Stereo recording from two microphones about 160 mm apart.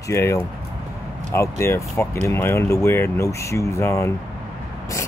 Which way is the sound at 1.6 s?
15° left (ahead or behind).